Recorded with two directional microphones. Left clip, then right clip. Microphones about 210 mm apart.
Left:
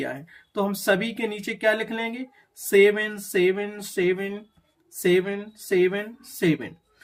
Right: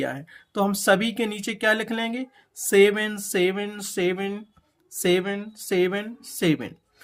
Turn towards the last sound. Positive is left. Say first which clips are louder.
# even
turn(degrees=-35)  # may be behind; listen again after turning